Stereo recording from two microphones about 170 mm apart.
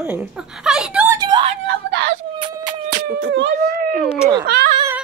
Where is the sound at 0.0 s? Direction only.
10° right (ahead or behind).